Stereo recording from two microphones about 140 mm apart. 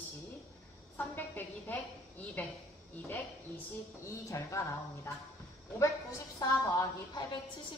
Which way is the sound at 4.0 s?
20° left (ahead or behind).